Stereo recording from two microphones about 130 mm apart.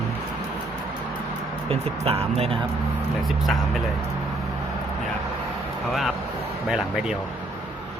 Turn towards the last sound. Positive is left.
turn(degrees=-5)  # may be behind; listen again after turning